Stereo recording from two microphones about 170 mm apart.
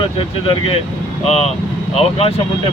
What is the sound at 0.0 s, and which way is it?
Speech, 30° left (ahead or behind).